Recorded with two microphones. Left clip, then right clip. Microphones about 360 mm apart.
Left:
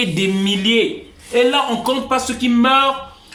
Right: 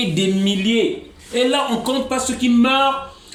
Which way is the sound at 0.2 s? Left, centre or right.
Centre.